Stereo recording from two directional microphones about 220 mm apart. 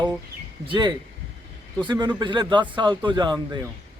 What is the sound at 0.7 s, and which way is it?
A man's voice, 20° right (ahead or behind).